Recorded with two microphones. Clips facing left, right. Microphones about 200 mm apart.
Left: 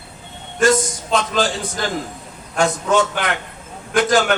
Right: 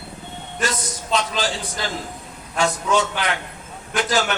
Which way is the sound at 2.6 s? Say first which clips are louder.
Left 3 dB; 50° left (ahead or behind).